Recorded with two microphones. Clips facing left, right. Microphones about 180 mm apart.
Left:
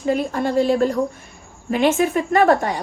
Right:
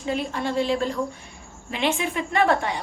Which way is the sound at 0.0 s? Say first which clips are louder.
Left 6 dB; 45° left (ahead or behind).